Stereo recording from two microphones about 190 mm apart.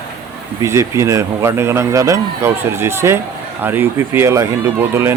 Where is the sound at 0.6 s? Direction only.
15° right (ahead or behind).